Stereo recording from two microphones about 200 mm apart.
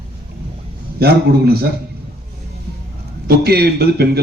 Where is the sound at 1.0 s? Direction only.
50° right (ahead or behind).